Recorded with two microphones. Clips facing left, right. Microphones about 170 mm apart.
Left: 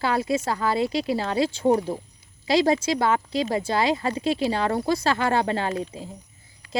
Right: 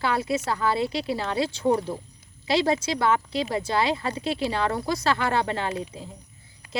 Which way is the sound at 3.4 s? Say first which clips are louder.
Left 3 dB; 30° left (ahead or behind).